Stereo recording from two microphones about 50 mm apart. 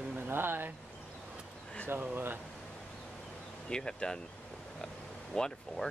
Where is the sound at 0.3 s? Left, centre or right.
Right.